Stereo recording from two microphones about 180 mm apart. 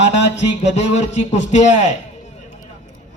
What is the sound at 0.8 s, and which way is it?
Speech, 40° left (ahead or behind).